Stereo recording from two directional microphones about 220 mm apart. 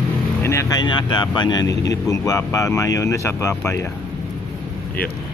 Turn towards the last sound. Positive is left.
turn(degrees=10)  # may be behind; listen again after turning